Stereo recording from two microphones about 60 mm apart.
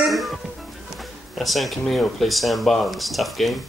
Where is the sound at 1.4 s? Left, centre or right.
Centre.